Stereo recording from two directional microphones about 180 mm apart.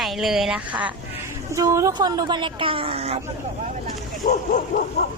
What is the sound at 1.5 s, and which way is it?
Speech, 15° right (ahead or behind).